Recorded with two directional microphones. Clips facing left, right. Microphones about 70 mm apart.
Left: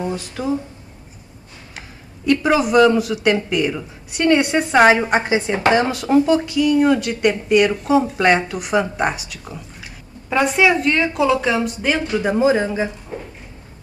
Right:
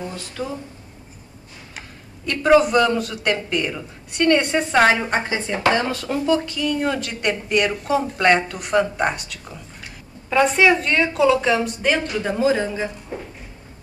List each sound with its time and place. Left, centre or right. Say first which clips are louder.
0.0 s speech: left 5 dB; left
1.7 s speech: left 1 dB; centre
12.2 s a man's voice: left 3 dB; centre